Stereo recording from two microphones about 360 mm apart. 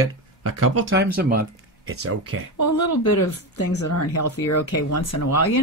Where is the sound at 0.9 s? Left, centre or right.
Right.